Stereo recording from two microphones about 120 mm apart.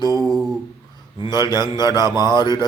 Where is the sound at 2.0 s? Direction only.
25° right (ahead or behind).